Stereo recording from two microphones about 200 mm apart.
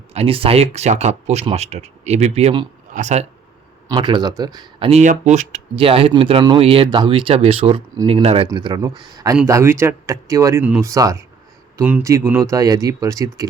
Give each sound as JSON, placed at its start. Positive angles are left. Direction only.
{"t": 0.1, "sound": "speech", "side_deg": -30}
{"t": 3.8, "sound": "speech", "side_deg": -20}